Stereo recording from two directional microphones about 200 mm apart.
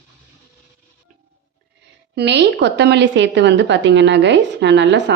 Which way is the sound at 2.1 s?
60° right (ahead or behind).